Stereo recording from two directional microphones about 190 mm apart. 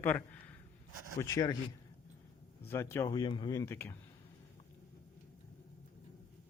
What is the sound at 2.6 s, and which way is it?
Speech, 10° left (ahead or behind).